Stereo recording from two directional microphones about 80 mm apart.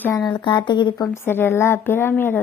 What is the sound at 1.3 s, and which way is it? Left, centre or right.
A woman's voice, left.